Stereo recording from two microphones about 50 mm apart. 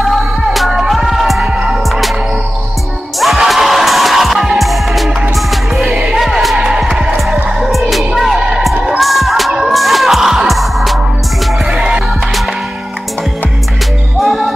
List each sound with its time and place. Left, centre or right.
0.0 s music: centre
3.2 s music: centre
8.4 s basketball bounce: centre
8.8 s music: centre
11.7 s music: centre
14.2 s music: centre